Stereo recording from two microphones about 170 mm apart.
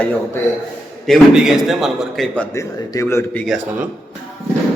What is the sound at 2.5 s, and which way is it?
Speech, 20° left (ahead or behind).